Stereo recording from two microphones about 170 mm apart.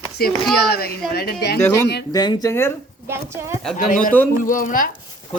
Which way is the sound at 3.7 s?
50° left (ahead or behind).